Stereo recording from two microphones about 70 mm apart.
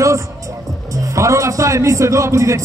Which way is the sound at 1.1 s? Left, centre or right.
Right.